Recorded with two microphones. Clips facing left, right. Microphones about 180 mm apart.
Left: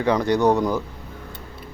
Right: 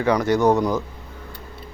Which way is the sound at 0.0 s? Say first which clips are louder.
Right 1 dB; 15° left (ahead or behind).